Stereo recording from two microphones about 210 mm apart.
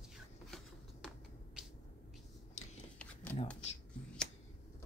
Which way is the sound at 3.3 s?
10° left (ahead or behind).